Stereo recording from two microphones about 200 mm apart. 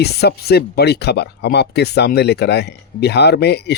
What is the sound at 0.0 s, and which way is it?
Speech, 55° left (ahead or behind).